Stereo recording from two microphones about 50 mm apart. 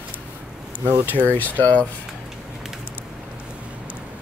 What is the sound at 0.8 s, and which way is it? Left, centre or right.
Speech, right.